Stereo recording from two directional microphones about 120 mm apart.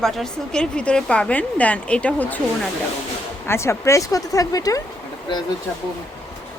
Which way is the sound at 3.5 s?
25° left (ahead or behind).